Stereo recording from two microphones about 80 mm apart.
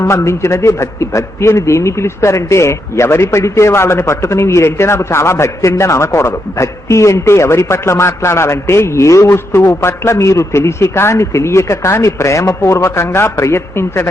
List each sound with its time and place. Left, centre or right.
0.0 s a man's voice: left